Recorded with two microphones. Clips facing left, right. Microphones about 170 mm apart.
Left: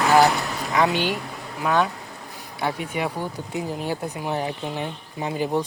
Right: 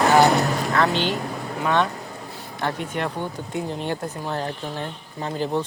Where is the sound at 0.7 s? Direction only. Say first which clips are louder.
Left 3 dB; 10° left (ahead or behind).